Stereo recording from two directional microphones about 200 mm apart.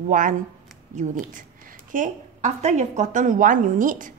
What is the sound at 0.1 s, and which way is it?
A woman's voice, 40° right (ahead or behind).